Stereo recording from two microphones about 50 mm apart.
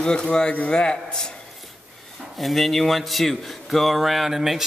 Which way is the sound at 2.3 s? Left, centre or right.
Centre.